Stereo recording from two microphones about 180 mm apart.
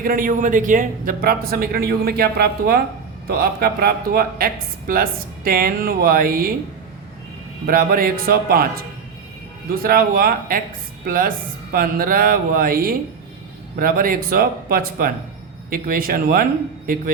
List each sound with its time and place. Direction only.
0.0 s speech: 50° right (ahead or behind)
7.7 s speech: 55° right (ahead or behind)
9.8 s speech: 55° right (ahead or behind)